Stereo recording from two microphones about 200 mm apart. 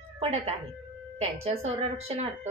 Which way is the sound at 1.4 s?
30° right (ahead or behind).